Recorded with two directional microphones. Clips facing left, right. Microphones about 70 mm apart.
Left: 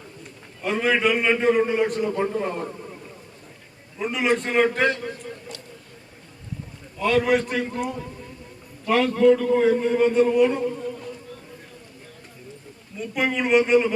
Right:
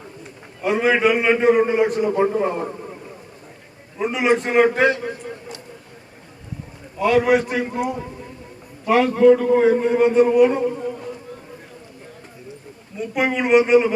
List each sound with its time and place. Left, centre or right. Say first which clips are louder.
0.6 s a man's voice: right 4 dB; centre
3.9 s a man's voice: right 4 dB; centre
5.0 s a sound: right 4 dB; centre
7.0 s a man's voice: right 4 dB; centre
13.0 s a man's voice: right 3 dB; centre